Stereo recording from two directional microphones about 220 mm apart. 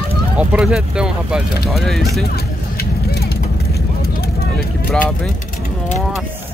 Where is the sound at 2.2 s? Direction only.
45° left (ahead or behind).